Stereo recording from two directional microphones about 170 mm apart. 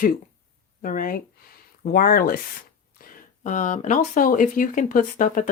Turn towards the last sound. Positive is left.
turn(degrees=50)  # may be behind; listen again after turning